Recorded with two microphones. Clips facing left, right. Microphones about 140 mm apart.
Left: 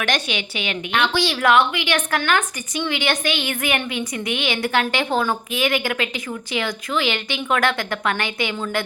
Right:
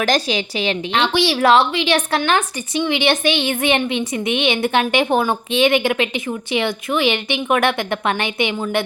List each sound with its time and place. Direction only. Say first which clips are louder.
0.0 s a woman's voice: right 5 dB; 35° right (ahead or behind)